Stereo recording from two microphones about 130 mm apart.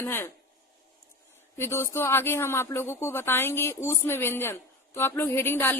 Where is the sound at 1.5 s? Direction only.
20° left (ahead or behind).